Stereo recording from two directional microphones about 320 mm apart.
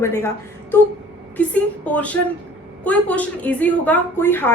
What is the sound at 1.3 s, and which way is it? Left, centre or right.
A woman's voice, centre.